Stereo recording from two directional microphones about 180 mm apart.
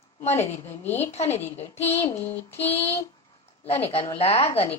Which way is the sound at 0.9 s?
35° left (ahead or behind).